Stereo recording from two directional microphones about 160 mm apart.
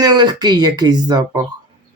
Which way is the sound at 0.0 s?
25° right (ahead or behind).